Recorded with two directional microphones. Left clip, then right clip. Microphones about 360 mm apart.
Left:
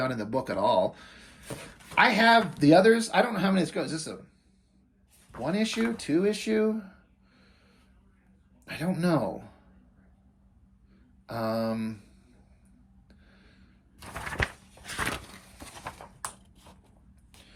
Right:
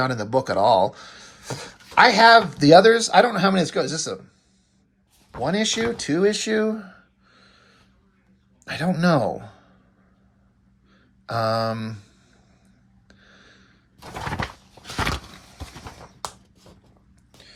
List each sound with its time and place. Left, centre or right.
0.0 s speech: centre
5.3 s speech: centre
8.6 s speech: centre
11.3 s speech: centre
13.1 s a sound: centre